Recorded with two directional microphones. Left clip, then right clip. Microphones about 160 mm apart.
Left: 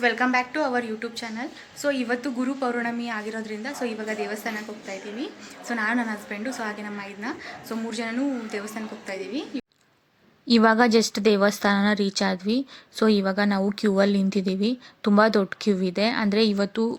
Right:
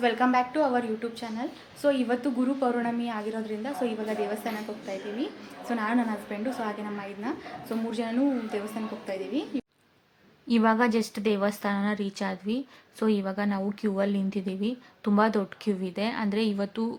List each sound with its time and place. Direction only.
0.0 s a woman's voice: centre (ahead or behind)
10.5 s a woman's voice: 35° left (ahead or behind)